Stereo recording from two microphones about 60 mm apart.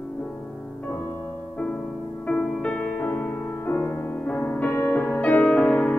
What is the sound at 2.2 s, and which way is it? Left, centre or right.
Music, left.